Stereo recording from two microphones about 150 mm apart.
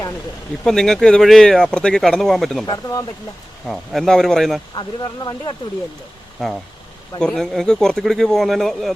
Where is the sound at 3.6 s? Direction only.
Centre (ahead or behind).